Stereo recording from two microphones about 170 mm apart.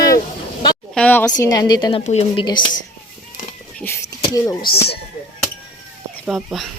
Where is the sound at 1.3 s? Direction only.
20° left (ahead or behind).